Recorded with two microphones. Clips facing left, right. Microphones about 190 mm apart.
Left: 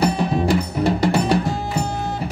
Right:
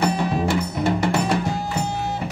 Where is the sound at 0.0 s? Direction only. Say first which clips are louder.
Left 2 dB; 35° left (ahead or behind).